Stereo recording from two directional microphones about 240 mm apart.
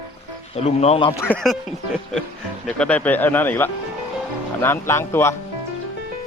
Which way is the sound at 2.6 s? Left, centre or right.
Centre.